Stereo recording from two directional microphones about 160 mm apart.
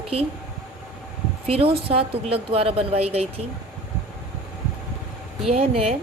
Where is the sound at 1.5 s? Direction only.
35° right (ahead or behind).